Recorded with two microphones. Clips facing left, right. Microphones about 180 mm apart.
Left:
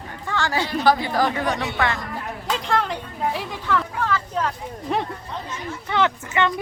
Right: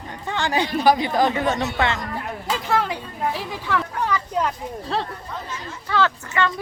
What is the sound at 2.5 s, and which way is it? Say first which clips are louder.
Speech: even; 5° right (ahead or behind).